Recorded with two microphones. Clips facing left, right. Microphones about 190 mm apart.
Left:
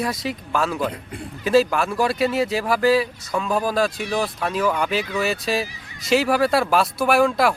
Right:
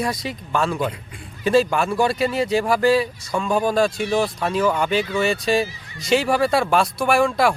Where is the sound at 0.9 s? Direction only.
55° left (ahead or behind).